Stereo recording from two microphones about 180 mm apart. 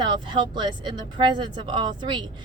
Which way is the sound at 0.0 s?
25° right (ahead or behind).